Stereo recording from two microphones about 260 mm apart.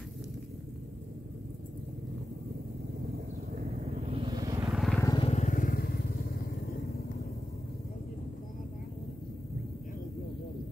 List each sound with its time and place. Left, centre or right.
3.9 s vehicle: right
4.7 s vehicle: centre
5.0 s vehicle: centre